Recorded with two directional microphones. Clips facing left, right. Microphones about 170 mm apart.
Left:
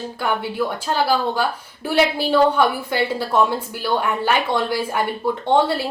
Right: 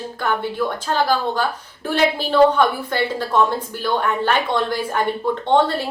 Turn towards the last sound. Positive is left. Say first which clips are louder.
# right 1 dB
turn(degrees=10)  # may be behind; listen again after turning